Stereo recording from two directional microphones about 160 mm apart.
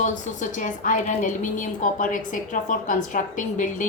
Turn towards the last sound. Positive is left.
turn(degrees=55)  # may be behind; listen again after turning